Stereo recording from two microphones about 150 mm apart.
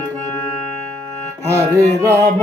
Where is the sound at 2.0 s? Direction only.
20° right (ahead or behind).